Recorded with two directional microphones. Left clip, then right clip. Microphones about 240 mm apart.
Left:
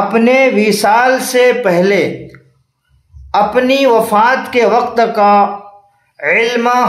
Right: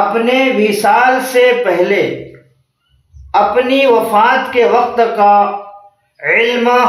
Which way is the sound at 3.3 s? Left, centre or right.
Left.